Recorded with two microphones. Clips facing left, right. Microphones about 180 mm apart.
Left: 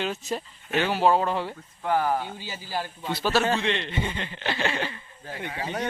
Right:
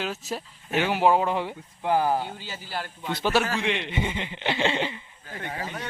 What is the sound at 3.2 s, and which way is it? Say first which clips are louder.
Speech: left 1 dB; 15° right (ahead or behind).